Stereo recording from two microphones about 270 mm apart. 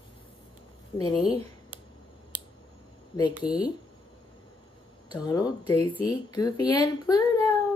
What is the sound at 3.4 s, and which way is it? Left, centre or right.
Speech, centre.